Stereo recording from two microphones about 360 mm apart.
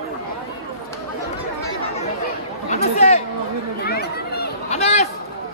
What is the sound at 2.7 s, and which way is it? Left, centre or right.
Chatter, centre.